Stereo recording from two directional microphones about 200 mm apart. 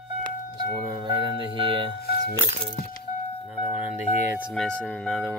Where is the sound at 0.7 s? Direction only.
20° right (ahead or behind).